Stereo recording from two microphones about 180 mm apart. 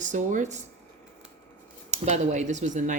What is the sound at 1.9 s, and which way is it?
Speech, 40° right (ahead or behind).